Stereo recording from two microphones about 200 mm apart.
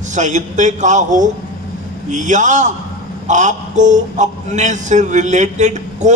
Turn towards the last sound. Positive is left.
turn(degrees=-35)  # may be behind; listen again after turning